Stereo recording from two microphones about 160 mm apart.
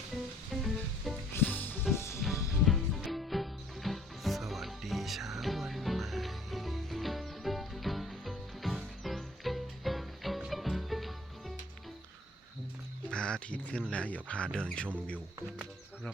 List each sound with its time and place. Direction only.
0.5 s music: centre (ahead or behind)
1.3 s music: 10° left (ahead or behind)
2.6 s music: centre (ahead or behind)
13.1 s a sound: 5° left (ahead or behind)
13.9 s speech: 5° left (ahead or behind)